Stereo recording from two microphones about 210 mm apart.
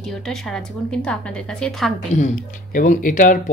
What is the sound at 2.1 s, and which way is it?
Speech, 40° left (ahead or behind).